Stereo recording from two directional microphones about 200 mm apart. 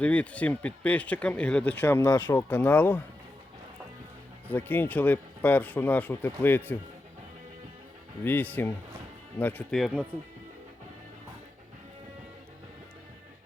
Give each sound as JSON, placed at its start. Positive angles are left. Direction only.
{"t": 0.0, "sound": "speech", "side_deg": 5}
{"t": 4.4, "sound": "speech", "side_deg": 10}
{"t": 8.2, "sound": "speech", "side_deg": 10}